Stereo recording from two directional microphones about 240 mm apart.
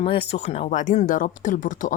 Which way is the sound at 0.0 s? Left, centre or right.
Left.